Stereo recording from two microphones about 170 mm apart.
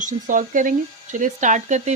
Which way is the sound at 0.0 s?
50° right (ahead or behind).